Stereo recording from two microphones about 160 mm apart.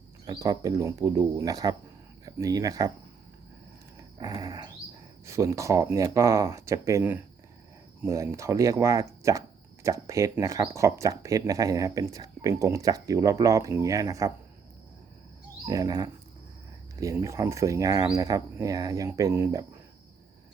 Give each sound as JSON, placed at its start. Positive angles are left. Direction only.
{"t": 0.3, "sound": "speech", "side_deg": -25}
{"t": 4.2, "sound": "speech", "side_deg": -25}
{"t": 15.6, "sound": "speech", "side_deg": -20}